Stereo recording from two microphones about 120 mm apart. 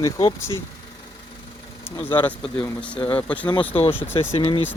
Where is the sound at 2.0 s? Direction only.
15° left (ahead or behind).